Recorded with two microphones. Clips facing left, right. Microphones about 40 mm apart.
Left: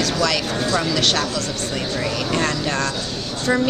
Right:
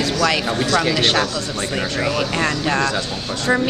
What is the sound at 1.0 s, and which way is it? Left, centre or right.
Speech, centre.